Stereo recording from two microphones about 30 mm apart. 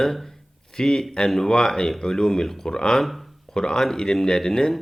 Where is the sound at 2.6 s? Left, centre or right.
Left.